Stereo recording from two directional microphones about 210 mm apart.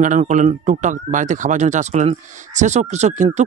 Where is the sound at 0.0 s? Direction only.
35° right (ahead or behind).